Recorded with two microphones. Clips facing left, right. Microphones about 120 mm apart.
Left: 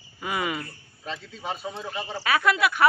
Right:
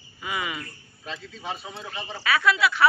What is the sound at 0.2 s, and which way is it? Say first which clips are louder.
Speech: left 3 dB; 45° left (ahead or behind).